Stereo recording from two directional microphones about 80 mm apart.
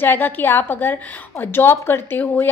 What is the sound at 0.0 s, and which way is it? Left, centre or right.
A woman's voice, left.